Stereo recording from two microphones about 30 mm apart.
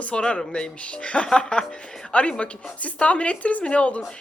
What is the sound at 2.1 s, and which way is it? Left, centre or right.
A man's voice, left.